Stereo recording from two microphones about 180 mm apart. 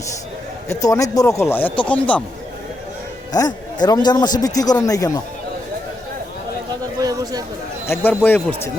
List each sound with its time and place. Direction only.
0.7 s speech: 20° left (ahead or behind)
3.3 s a man's voice: 20° left (ahead or behind)
7.0 s a sound: 20° right (ahead or behind)
7.9 s speech: 10° left (ahead or behind)